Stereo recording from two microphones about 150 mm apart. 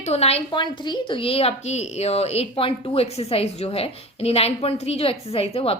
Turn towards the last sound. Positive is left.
turn(degrees=40)  # may be behind; listen again after turning